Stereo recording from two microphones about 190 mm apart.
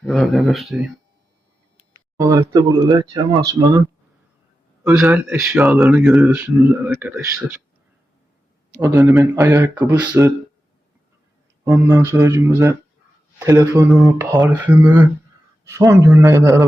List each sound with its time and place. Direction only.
0.0 s speech: centre (ahead or behind)
2.1 s speech: 15° right (ahead or behind)
8.8 s speech: 15° right (ahead or behind)
11.6 s speech: 15° right (ahead or behind)